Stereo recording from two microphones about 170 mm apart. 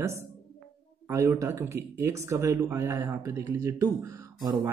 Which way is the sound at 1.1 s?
15° right (ahead or behind).